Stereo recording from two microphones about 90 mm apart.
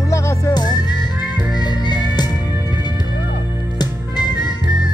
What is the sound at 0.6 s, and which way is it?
Music, 50° left (ahead or behind).